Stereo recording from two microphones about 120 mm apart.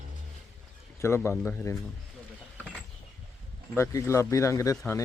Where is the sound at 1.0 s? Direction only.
20° left (ahead or behind).